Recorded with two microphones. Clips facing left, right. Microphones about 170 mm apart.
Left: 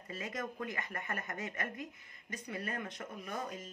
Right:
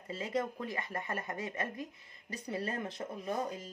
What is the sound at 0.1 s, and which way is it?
Speech, 25° right (ahead or behind).